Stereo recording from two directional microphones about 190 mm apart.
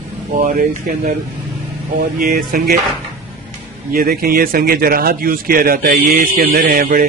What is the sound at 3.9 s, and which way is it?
A man's voice, 50° right (ahead or behind).